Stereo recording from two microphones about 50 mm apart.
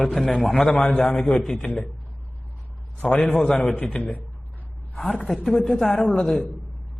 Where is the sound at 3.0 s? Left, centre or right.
Centre.